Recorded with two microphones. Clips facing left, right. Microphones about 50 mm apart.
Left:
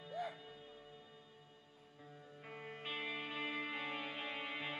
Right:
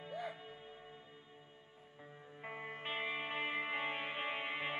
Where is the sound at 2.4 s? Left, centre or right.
Right.